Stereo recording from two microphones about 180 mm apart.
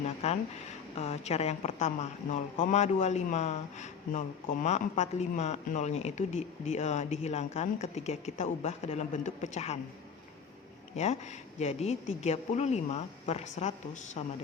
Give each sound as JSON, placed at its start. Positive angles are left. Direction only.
{"t": 0.0, "sound": "a sound", "side_deg": 35}
{"t": 0.9, "sound": "speech", "side_deg": 35}
{"t": 10.9, "sound": "speech", "side_deg": 40}